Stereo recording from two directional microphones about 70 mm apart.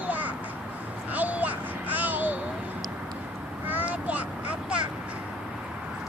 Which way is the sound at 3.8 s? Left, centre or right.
Centre.